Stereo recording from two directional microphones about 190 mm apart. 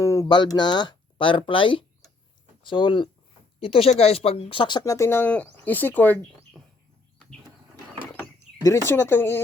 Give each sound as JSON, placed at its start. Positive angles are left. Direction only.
{"t": 0.0, "sound": "a sound", "side_deg": 15}
{"t": 0.5, "sound": "speech", "side_deg": 25}
{"t": 8.6, "sound": "speech", "side_deg": 15}